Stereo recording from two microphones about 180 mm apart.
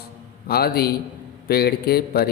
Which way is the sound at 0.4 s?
60° left (ahead or behind).